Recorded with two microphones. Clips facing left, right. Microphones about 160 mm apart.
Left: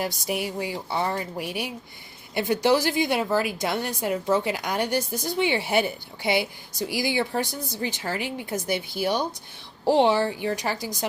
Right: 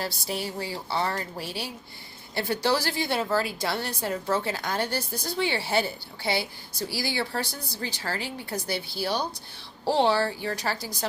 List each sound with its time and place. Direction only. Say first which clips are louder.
0.0 s a woman's voice: left 4 dB; 15° left (ahead or behind)